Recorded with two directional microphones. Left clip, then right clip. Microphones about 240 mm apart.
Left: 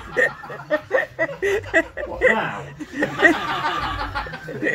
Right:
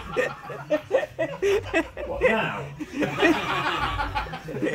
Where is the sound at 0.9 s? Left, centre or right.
Centre.